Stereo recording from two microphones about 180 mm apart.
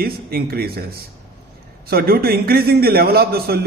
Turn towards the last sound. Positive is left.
turn(degrees=-60)  # may be behind; listen again after turning